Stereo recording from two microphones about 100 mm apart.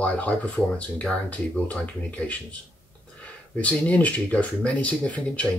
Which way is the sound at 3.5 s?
15° left (ahead or behind).